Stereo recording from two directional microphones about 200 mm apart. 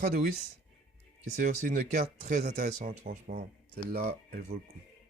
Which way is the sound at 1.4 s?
40° right (ahead or behind).